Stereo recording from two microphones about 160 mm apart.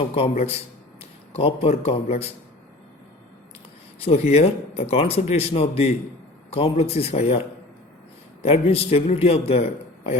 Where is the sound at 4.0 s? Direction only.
40° left (ahead or behind).